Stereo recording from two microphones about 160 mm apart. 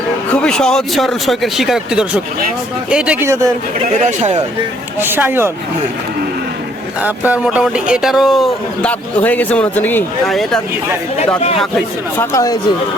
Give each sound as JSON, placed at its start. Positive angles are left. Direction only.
{"t": 0.3, "sound": "speech", "side_deg": 5}
{"t": 3.9, "sound": "speech", "side_deg": -45}
{"t": 4.9, "sound": "speech", "side_deg": -10}
{"t": 7.0, "sound": "speech", "side_deg": -10}
{"t": 12.1, "sound": "speech", "side_deg": 15}